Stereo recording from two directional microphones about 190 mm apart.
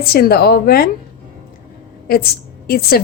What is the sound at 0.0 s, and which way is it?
Speech, 55° left (ahead or behind).